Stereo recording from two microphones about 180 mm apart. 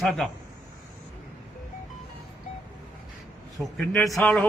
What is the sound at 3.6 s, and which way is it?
Speech, centre (ahead or behind).